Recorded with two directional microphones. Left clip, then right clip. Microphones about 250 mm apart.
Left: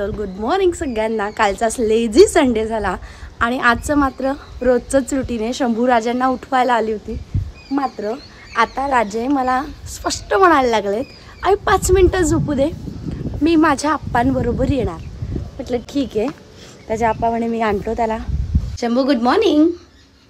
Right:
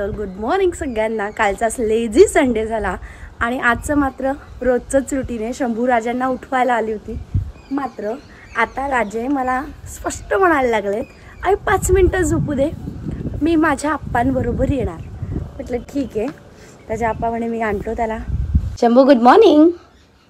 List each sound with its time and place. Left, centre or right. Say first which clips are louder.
0.0 s speech: left 1 dB; centre
16.1 s speech: left 2 dB; centre